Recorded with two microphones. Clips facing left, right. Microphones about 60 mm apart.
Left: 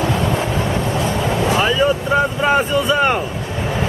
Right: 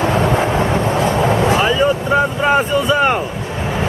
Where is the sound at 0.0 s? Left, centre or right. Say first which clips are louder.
Right 4 dB; right.